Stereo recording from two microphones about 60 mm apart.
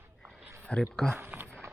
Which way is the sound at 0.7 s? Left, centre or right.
Left.